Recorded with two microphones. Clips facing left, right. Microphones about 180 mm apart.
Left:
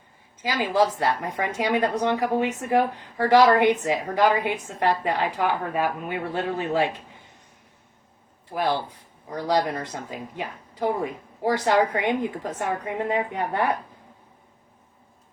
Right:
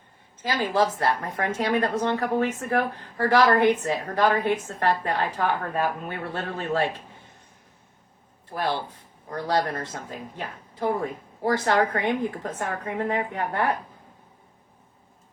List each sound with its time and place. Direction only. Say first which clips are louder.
0.4 s a woman's voice: left 1 dB; 15° left (ahead or behind)
9.3 s a woman's voice: left 2 dB; 15° left (ahead or behind)